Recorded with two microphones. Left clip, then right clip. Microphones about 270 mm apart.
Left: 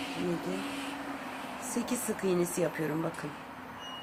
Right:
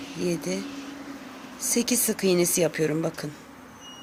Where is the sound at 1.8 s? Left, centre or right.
Right.